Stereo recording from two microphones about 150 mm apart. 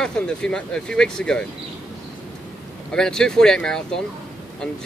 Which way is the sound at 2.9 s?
5° left (ahead or behind).